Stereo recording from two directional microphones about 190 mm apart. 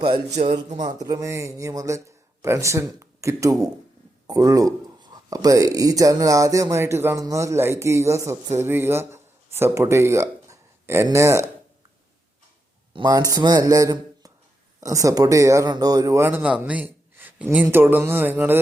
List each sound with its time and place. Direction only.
0.0 s a man's voice: 35° right (ahead or behind)
0.9 s speech: 20° right (ahead or behind)
12.9 s a man's voice: 20° right (ahead or behind)